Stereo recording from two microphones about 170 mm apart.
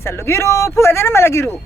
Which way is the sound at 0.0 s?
15° left (ahead or behind).